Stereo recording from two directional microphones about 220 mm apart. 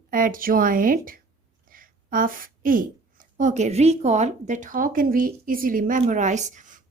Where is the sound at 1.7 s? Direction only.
40° right (ahead or behind).